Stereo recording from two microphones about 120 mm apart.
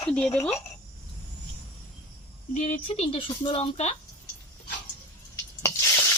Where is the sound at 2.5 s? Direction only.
80° left.